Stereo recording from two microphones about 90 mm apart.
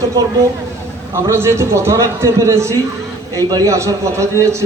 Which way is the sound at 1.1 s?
30° right (ahead or behind).